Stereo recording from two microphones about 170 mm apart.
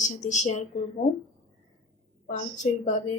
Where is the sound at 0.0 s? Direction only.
45° left (ahead or behind).